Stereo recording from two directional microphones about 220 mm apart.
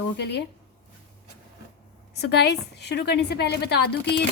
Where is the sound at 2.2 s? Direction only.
50° left (ahead or behind).